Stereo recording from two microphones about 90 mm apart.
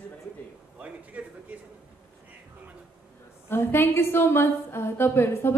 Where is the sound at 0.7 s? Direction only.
15° right (ahead or behind).